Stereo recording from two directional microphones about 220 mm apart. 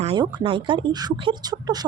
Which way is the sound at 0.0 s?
25° right (ahead or behind).